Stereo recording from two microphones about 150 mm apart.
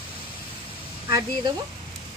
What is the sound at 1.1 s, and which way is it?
Speech, 30° right (ahead or behind).